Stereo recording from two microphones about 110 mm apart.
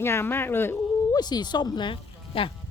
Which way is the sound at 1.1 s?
40° left (ahead or behind).